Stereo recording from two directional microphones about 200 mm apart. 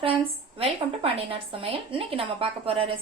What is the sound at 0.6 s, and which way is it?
A woman's voice, 30° right (ahead or behind).